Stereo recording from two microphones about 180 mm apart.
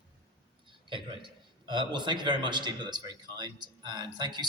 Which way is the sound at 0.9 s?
25° right (ahead or behind).